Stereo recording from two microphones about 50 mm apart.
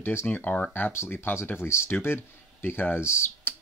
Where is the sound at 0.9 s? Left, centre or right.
Left.